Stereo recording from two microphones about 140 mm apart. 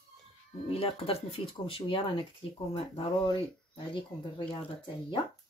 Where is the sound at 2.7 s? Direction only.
40° left (ahead or behind).